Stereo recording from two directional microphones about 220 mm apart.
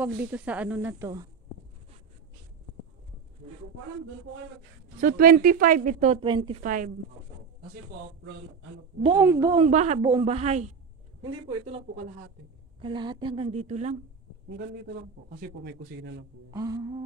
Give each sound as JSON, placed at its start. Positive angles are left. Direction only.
{"t": 0.0, "sound": "speech", "side_deg": -10}
{"t": 5.0, "sound": "speech", "side_deg": -40}
{"t": 6.6, "sound": "speech", "side_deg": -35}
{"t": 9.1, "sound": "speech", "side_deg": -15}
{"t": 9.6, "sound": "a woman's voice", "side_deg": -30}
{"t": 15.2, "sound": "speech", "side_deg": -40}
{"t": 16.4, "sound": "speech", "side_deg": -15}